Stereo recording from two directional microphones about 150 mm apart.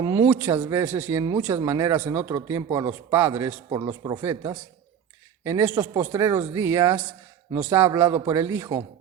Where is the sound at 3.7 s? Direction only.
25° right (ahead or behind).